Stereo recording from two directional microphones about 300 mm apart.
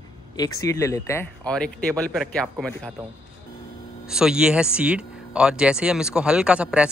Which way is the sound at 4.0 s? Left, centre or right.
Centre.